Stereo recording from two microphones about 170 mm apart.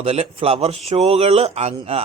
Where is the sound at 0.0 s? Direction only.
35° right (ahead or behind).